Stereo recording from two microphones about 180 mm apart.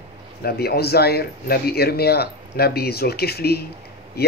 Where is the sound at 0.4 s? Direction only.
60° left (ahead or behind).